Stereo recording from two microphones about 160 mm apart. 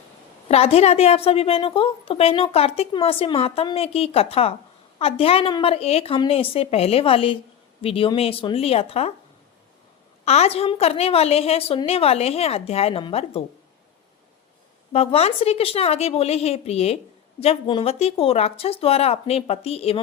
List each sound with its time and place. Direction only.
0.4 s a woman's voice: 40° left (ahead or behind)
10.2 s a woman's voice: 40° left (ahead or behind)
14.9 s a woman's voice: 40° left (ahead or behind)